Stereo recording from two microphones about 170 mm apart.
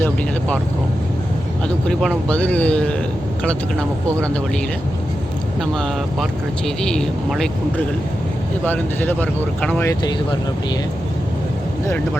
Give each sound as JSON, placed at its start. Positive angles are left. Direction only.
{"t": 0.0, "sound": "vehicle", "side_deg": 5}
{"t": 1.9, "sound": "speech", "side_deg": 5}
{"t": 5.7, "sound": "speech", "side_deg": 5}
{"t": 9.8, "sound": "speech", "side_deg": 20}